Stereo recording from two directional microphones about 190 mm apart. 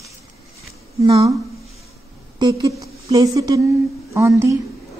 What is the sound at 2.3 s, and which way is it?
Speech, 20° right (ahead or behind).